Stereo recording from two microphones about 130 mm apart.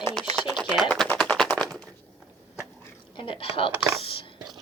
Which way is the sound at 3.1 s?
40° left (ahead or behind).